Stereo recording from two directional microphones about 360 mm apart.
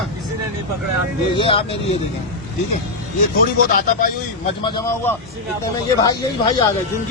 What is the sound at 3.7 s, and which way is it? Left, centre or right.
Speech, left.